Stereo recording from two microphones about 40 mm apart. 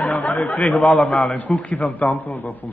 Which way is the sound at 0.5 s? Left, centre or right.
Left.